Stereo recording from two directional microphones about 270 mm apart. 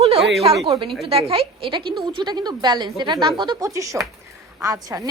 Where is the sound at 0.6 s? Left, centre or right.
Centre.